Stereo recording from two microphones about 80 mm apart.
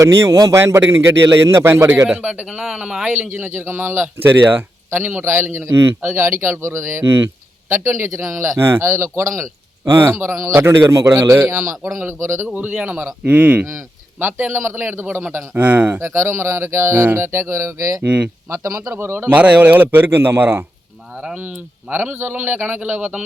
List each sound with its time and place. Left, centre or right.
0.0 s speech: right
0.6 s speech: right
2.0 s a man's voice: centre
3.1 s a man's voice: right
12.5 s a man's voice: right
16.0 s speech: right
18.0 s a man's voice: centre
18.5 s speech: right
18.9 s a man's voice: right
21.2 s a man's voice: centre